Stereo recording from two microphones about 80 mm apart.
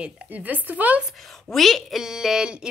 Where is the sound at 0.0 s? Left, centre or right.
Right.